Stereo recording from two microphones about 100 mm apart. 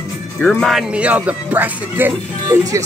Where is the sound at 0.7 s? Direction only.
15° right (ahead or behind).